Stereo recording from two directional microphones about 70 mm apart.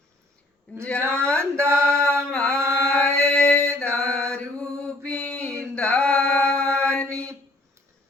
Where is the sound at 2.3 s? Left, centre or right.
Centre.